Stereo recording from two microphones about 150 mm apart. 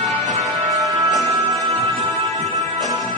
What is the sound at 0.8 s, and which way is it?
Music, 20° right (ahead or behind).